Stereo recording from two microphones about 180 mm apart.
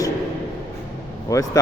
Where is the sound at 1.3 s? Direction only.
20° left (ahead or behind).